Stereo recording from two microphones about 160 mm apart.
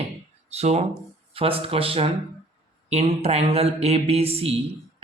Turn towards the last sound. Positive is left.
turn(degrees=-40)  # may be behind; listen again after turning